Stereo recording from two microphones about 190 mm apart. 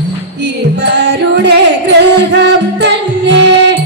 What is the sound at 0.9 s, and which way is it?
Music, 60° right (ahead or behind).